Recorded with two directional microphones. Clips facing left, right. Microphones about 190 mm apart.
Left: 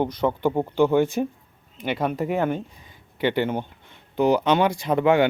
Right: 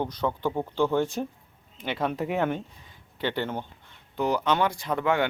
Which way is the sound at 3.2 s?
15° left (ahead or behind).